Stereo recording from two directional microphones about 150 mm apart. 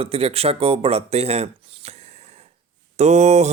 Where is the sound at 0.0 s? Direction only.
40° right (ahead or behind).